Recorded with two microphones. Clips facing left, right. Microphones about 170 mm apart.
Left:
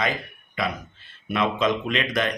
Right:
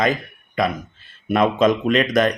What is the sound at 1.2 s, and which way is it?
Speech, 45° right (ahead or behind).